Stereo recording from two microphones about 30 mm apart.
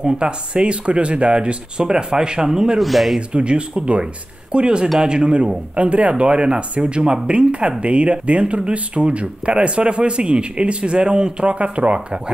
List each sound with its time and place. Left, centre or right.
0.2 s speech: right
1.8 s speech: right
2.8 s speech: centre
3.2 s speech: right
7.8 s speech: right
11.5 s speech: right